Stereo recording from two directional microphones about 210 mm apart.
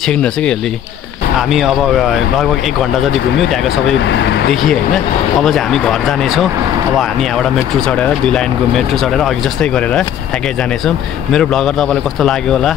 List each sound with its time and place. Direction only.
0.0 s speech: 5° left (ahead or behind)
3.0 s speech: centre (ahead or behind)
4.0 s speech: 55° left (ahead or behind)
5.4 s speech: centre (ahead or behind)
11.3 s speech: centre (ahead or behind)